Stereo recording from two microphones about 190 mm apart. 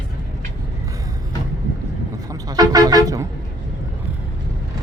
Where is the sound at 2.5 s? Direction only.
20° right (ahead or behind).